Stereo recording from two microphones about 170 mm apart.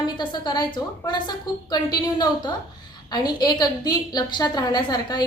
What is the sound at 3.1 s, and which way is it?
A woman's voice, 25° left (ahead or behind).